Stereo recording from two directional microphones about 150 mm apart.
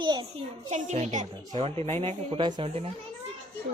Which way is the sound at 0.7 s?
50° right (ahead or behind).